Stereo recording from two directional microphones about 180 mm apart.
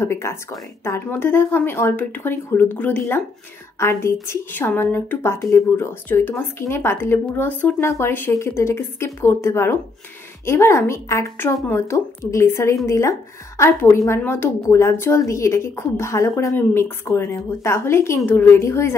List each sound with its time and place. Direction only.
0.0 s a woman's voice: 15° left (ahead or behind)